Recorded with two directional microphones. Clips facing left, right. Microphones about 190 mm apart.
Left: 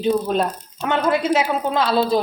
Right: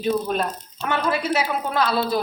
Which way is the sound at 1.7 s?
25° left (ahead or behind).